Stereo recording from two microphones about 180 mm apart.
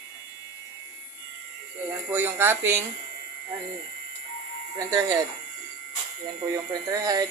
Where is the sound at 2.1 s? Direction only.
10° right (ahead or behind).